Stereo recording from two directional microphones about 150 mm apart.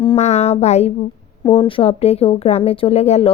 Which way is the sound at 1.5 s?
35° left (ahead or behind).